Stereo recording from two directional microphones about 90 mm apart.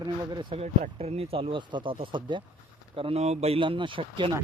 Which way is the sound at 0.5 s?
90° right.